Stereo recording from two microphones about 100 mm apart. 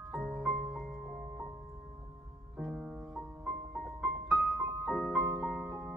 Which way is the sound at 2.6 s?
5° right (ahead or behind).